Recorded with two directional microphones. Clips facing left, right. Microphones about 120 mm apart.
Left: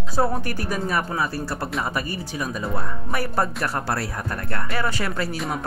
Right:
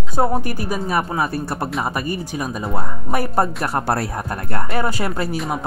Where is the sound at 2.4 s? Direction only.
40° right (ahead or behind).